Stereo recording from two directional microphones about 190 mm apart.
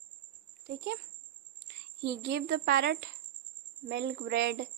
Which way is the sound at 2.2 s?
60° right (ahead or behind).